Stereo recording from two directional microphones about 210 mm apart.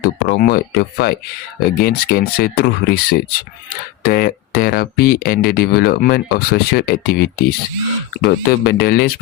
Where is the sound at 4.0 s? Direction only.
45° left (ahead or behind).